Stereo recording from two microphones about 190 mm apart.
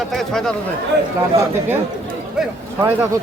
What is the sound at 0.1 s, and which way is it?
Speech, centre (ahead or behind).